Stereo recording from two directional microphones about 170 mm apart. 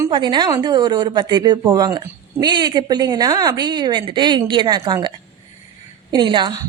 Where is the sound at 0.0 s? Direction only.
25° right (ahead or behind).